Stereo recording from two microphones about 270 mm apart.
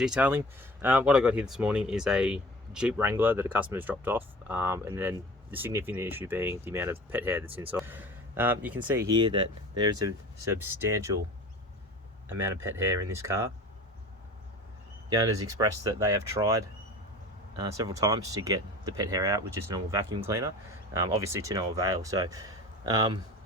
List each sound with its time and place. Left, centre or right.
0.0 s speech: centre
10.1 s speech: right
10.6 s speech: centre
12.3 s speech: centre
15.4 s speech: centre
17.7 s speech: centre